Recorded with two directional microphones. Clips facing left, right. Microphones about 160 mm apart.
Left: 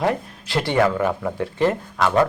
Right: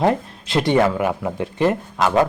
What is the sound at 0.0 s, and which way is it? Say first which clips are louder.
Speech: right 3 dB; 25° right (ahead or behind).